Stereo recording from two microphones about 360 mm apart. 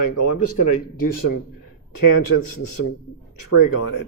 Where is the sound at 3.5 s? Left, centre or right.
Left.